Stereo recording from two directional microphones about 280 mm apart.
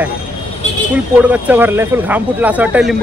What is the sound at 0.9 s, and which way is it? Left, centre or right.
Speech, centre.